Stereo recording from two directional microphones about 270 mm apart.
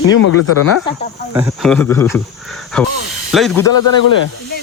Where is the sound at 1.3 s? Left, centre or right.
Centre.